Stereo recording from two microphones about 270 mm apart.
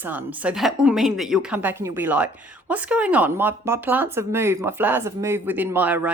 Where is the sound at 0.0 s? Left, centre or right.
Centre.